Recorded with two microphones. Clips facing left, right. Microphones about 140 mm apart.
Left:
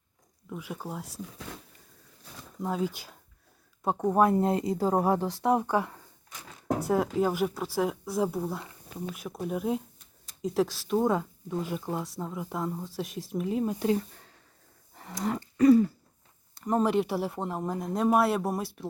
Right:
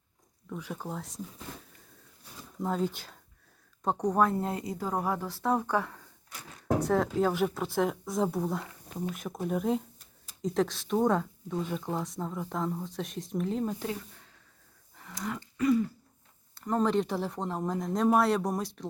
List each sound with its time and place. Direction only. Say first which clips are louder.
0.5 s speech: even; 10° left (ahead or behind)
2.6 s speech: even; 5° left (ahead or behind)
15.2 s a sound: left 7 dB; 40° left (ahead or behind)
16.6 s speech: left 2 dB; 15° left (ahead or behind)